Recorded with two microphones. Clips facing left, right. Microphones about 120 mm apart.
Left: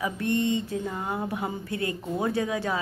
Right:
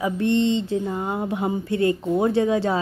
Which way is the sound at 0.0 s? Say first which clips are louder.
Right 6 dB; 25° right (ahead or behind).